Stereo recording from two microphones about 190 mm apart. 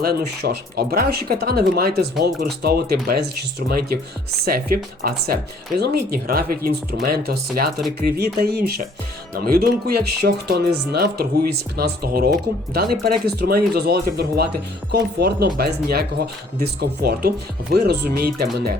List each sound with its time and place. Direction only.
0.0 s speech: 55° right (ahead or behind)